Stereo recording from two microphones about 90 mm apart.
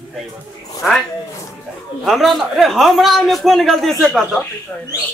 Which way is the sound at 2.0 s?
Centre (ahead or behind).